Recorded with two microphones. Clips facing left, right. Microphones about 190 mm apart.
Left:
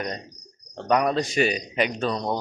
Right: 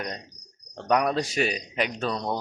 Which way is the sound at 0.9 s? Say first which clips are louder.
Left 2 dB; 5° right (ahead or behind).